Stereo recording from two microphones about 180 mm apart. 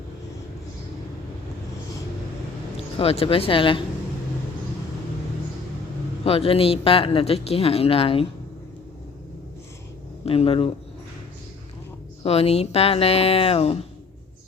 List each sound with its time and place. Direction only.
2.7 s speech: 35° left (ahead or behind)
6.2 s speech: 30° left (ahead or behind)
10.2 s speech: 30° left (ahead or behind)
12.2 s speech: 35° left (ahead or behind)